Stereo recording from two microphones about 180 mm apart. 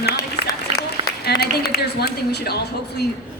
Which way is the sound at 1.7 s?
65° left (ahead or behind).